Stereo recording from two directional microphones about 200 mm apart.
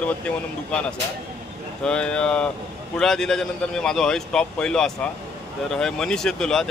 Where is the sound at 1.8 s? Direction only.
5° left (ahead or behind).